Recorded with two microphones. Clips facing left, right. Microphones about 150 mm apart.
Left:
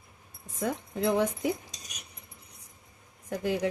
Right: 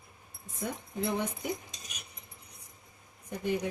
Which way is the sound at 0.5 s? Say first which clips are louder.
Left 5 dB; 90° left.